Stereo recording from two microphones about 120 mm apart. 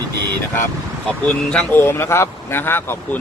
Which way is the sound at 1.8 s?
20° left (ahead or behind).